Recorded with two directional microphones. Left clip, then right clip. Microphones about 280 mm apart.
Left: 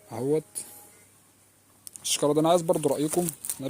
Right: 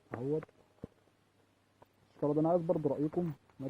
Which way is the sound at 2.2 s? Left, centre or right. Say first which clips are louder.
Left 8 dB; left.